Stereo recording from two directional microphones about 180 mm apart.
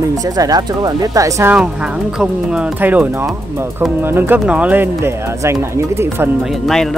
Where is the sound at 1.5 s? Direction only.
5° right (ahead or behind).